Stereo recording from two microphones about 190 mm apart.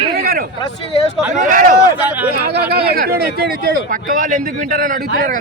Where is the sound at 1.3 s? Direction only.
45° right (ahead or behind).